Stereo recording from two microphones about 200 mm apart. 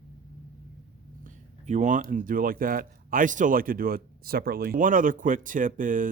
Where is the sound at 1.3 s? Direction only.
35° right (ahead or behind).